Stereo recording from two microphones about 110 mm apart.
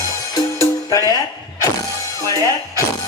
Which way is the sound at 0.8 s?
30° left (ahead or behind).